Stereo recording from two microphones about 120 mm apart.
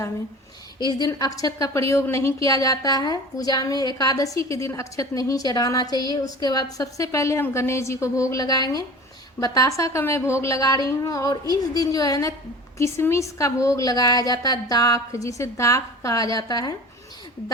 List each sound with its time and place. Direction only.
0.9 s a woman's voice: 30° left (ahead or behind)